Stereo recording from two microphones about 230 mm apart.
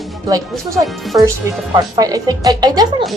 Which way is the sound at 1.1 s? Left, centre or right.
Centre.